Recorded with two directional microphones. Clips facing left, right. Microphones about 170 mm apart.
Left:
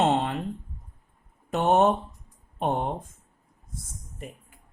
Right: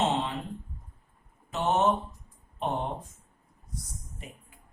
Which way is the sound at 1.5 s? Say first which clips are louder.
Left 5 dB; 55° left (ahead or behind).